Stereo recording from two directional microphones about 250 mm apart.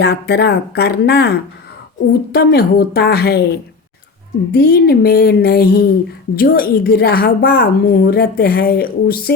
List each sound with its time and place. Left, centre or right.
0.0 s a woman's voice: left